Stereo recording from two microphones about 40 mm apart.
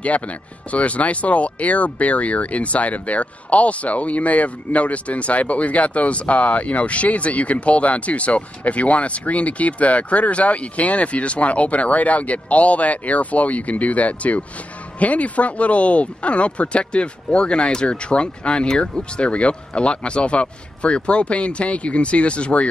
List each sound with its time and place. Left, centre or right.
0.0 s speech: left